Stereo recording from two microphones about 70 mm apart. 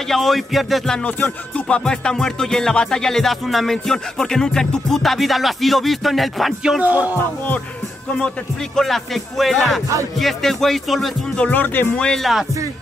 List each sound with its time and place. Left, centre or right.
0.1 s speech: centre
1.0 s music: centre
6.8 s music: right
8.7 s speech: centre
11.3 s speech: left
11.9 s music: centre
12.2 s speech: centre